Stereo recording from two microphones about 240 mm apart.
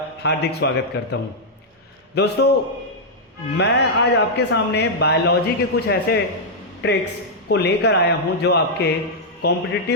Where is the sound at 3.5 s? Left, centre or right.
Left.